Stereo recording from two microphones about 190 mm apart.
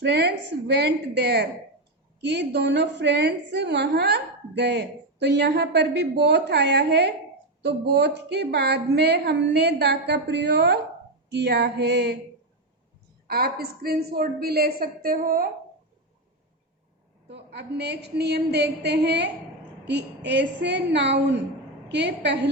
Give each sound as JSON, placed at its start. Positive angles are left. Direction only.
{"t": 0.0, "sound": "a woman's voice", "side_deg": -60}
{"t": 13.2, "sound": "a woman's voice", "side_deg": -55}
{"t": 17.2, "sound": "a woman's voice", "side_deg": -65}